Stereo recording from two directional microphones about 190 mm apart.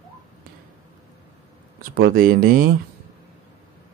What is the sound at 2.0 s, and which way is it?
Speech, 50° right (ahead or behind).